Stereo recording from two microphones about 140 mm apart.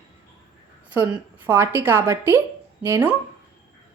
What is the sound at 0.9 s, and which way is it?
A woman's voice, 15° right (ahead or behind).